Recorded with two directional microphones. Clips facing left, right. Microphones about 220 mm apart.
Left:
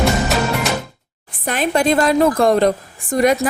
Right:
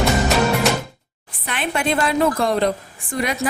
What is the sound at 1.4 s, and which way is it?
A woman's voice, 40° left (ahead or behind).